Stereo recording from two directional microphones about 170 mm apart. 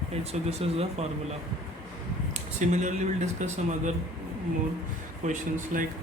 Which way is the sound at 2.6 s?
45° right (ahead or behind).